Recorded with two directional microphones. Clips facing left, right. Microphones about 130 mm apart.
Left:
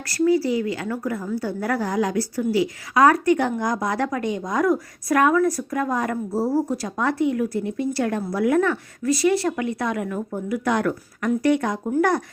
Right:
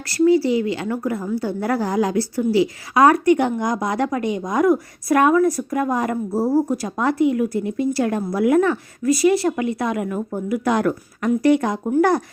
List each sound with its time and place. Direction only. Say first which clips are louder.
0.1 s a woman's voice: right 4 dB; 25° right (ahead or behind)